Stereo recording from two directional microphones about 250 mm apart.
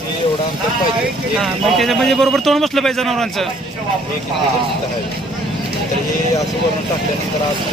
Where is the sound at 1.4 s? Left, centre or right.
Centre.